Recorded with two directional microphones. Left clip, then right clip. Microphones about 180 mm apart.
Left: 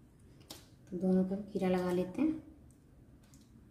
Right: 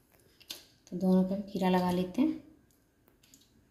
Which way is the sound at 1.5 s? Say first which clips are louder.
Right 4 dB; 50° right (ahead or behind).